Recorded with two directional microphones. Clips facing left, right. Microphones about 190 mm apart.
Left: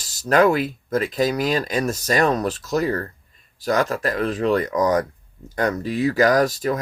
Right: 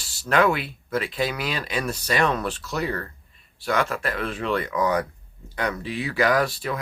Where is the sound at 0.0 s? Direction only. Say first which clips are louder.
Left 4 dB; 40° left (ahead or behind).